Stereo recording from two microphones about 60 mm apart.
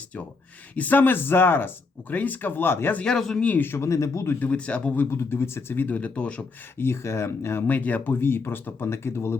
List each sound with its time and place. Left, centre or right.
0.8 s speech: left
2.9 s a man's voice: centre
3.2 s speech: centre
3.6 s speech: left
3.8 s speech: left
4.4 s speech: left
5.1 s speech: left
6.7 s speech: left
7.7 s speech: left
8.2 s speech: left